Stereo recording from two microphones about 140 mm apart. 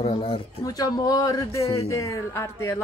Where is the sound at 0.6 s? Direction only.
25° left (ahead or behind).